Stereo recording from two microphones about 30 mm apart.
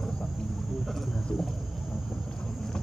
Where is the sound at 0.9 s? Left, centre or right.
Centre.